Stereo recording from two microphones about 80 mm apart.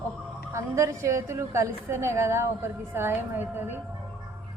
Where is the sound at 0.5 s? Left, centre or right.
Right.